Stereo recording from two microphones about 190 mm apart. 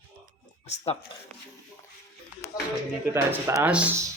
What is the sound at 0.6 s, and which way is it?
Speech, 35° left (ahead or behind).